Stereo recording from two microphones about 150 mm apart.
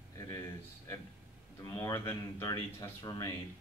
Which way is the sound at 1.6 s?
25° left (ahead or behind).